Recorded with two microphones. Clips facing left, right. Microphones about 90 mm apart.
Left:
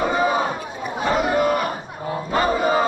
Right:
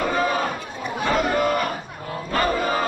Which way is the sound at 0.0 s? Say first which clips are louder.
Left 2 dB; 15° left (ahead or behind).